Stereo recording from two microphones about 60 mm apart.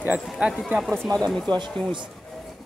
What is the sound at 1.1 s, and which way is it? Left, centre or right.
Speech, centre.